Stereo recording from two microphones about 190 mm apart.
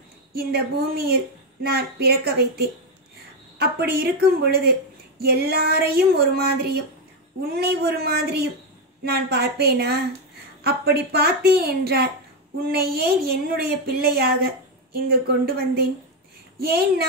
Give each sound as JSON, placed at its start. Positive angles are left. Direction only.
{"t": 0.3, "sound": "a woman's voice", "side_deg": -55}